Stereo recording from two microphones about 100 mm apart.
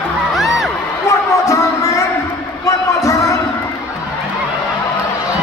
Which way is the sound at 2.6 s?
35° left (ahead or behind).